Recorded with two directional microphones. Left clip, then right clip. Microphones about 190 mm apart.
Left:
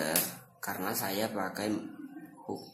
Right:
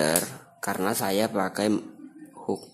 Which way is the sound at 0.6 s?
55° right (ahead or behind).